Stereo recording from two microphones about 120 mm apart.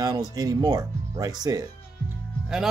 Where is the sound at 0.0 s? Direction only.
30° right (ahead or behind).